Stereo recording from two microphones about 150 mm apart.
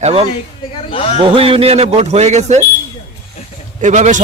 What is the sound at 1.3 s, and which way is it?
A man's voice, 40° right (ahead or behind).